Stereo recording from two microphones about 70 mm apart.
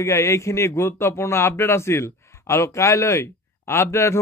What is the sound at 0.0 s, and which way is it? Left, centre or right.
A man's voice, left.